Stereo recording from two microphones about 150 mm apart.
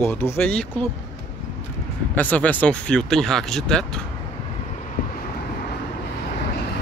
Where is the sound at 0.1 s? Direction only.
15° left (ahead or behind).